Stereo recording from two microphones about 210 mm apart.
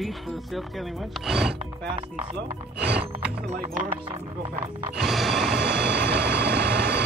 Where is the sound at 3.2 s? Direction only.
5° right (ahead or behind).